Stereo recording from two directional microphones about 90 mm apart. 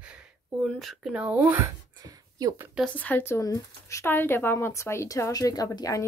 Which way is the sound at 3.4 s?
40° left (ahead or behind).